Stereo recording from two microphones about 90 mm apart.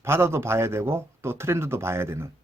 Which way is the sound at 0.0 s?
30° right (ahead or behind).